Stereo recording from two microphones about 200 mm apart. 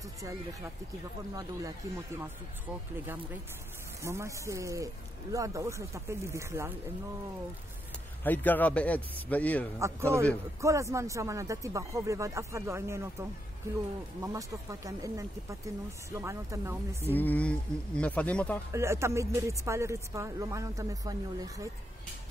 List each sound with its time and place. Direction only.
4.0 s speech: 15° right (ahead or behind)
8.2 s a man's voice: 10° left (ahead or behind)
9.8 s speech: 15° right (ahead or behind)
17.1 s a man's voice: 10° left (ahead or behind)
18.7 s speech: 15° right (ahead or behind)